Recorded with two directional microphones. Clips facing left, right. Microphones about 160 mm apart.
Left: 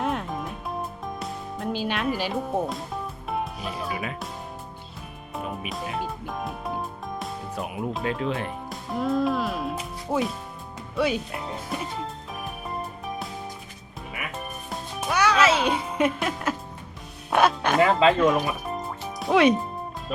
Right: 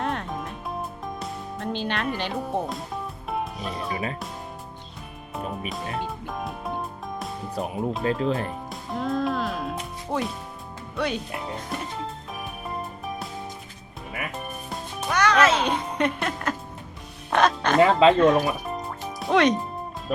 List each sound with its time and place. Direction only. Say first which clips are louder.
0.0 s music: left 1 dB; 5° left (ahead or behind)
5.3 s music: right 1 dB; centre (ahead or behind)
8.2 s speech: right 3 dB; 35° right (ahead or behind)
8.4 s speech: even; centre (ahead or behind)
12.3 s music: even; centre (ahead or behind)
14.7 s music: left 1 dB; 5° left (ahead or behind)
17.3 s speech: even; 10° left (ahead or behind)
17.7 s speech: right 3 dB; 25° right (ahead or behind)
18.1 s speech: right 3 dB; 5° left (ahead or behind)
18.3 s music: right 2 dB; centre (ahead or behind)
20.1 s music: right 5 dB; 50° right (ahead or behind)